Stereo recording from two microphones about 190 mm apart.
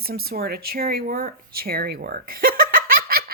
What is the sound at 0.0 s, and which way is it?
Speech, 55° right (ahead or behind).